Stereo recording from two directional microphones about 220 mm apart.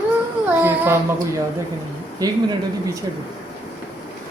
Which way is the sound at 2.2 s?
15° right (ahead or behind).